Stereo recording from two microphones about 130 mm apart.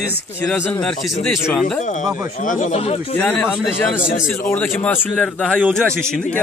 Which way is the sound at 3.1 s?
10° left (ahead or behind).